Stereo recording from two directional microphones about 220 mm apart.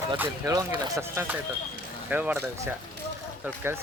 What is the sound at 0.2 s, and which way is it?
Speech, 10° right (ahead or behind).